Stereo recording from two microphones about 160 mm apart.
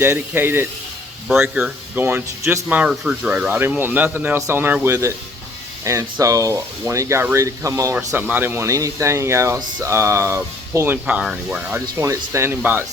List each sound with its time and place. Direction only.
0.0 s speech: 15° right (ahead or behind)